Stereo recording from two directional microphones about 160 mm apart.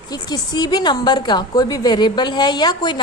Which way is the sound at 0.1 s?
25° left (ahead or behind).